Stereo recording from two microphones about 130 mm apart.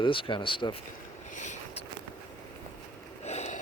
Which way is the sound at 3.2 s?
60° left (ahead or behind).